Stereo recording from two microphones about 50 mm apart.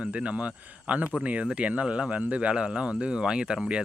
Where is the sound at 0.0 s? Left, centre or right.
Right.